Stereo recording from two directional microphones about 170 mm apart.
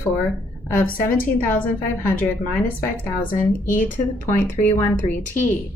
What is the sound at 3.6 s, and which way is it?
Speech, 50° left (ahead or behind).